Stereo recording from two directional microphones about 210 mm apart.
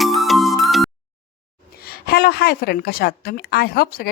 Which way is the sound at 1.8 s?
45° left (ahead or behind).